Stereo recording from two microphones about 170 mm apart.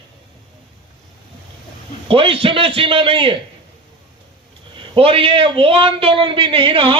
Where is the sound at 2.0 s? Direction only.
30° right (ahead or behind).